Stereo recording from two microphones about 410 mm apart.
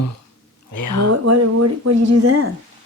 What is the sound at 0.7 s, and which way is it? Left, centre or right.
Speech, left.